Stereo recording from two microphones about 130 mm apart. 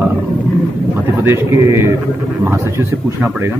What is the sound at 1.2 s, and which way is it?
Speech, 20° right (ahead or behind).